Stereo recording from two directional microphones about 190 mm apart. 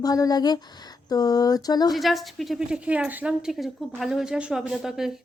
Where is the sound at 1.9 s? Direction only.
Centre (ahead or behind).